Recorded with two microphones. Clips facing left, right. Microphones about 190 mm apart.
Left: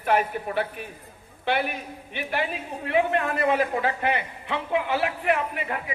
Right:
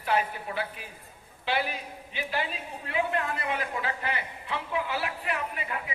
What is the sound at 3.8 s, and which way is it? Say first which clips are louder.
A man's voice: left 7 dB; 55° left (ahead or behind).